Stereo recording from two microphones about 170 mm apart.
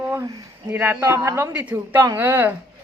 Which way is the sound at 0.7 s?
10° right (ahead or behind).